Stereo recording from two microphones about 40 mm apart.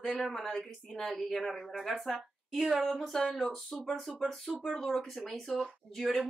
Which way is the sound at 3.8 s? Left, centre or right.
Centre.